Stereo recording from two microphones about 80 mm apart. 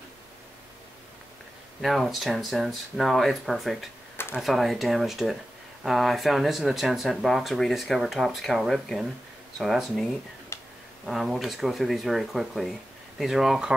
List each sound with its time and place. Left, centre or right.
1.8 s speech: centre
10.5 s a sound: left
11.1 s speech: centre